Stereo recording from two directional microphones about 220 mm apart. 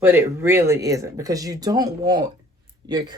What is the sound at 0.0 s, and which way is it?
Speech, 10° right (ahead or behind).